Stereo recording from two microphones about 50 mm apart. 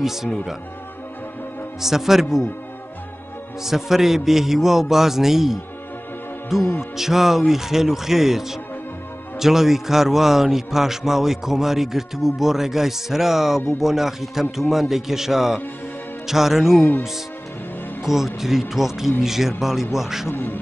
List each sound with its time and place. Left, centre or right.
0.0 s a man's voice: centre
1.8 s a man's voice: centre
3.6 s a man's voice: centre
18.0 s a man's voice: centre
20.2 s speech: left